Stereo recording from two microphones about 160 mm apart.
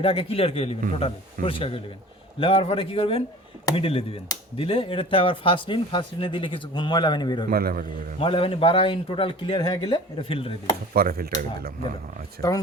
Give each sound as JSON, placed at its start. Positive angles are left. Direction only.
{"t": 0.0, "sound": "speech", "side_deg": 35}
{"t": 7.5, "sound": "a man's voice", "side_deg": -65}
{"t": 8.2, "sound": "speech", "side_deg": 35}
{"t": 10.9, "sound": "a man's voice", "side_deg": -70}
{"t": 12.4, "sound": "speech", "side_deg": -65}